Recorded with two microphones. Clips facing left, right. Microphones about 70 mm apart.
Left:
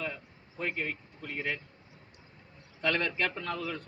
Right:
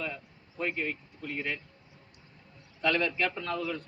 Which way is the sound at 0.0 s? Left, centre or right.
Left.